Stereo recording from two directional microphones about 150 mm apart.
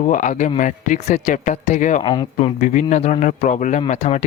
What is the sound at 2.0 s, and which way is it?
Speech, 30° left (ahead or behind).